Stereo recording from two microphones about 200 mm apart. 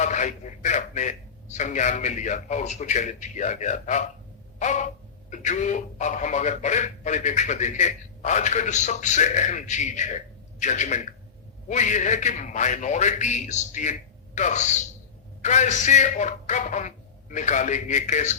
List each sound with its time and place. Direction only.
0.0 s speech: 40° left (ahead or behind)